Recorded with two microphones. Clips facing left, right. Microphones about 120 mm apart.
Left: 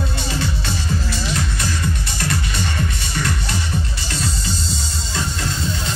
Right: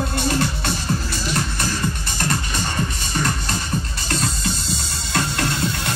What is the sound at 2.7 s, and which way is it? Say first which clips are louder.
Music: right 1 dB; 40° right (ahead or behind).